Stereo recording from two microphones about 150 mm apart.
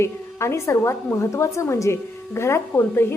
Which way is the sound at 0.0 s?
20° left (ahead or behind).